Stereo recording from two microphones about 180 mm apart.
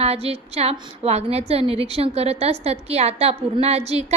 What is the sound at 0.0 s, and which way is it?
A woman's voice, 35° right (ahead or behind).